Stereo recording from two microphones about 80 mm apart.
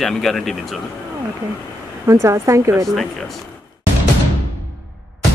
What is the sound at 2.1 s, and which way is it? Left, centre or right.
Speech, right.